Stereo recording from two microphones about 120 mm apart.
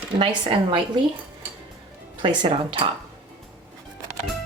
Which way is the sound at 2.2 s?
45° right (ahead or behind).